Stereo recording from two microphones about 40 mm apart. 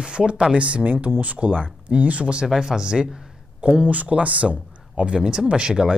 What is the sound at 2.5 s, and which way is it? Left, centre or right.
Speech, centre.